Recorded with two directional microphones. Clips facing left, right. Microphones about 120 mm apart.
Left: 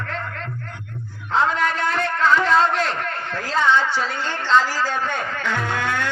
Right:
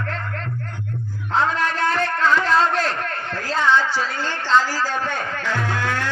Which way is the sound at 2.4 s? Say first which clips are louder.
Left 1 dB; 35° right (ahead or behind).